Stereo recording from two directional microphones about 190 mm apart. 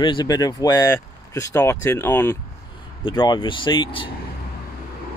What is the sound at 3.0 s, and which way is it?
Speech, 25° left (ahead or behind).